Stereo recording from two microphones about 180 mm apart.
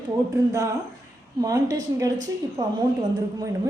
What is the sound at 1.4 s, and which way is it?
A woman's voice, 20° right (ahead or behind).